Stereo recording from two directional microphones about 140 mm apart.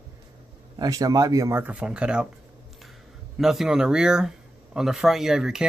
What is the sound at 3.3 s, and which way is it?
Speech, centre (ahead or behind).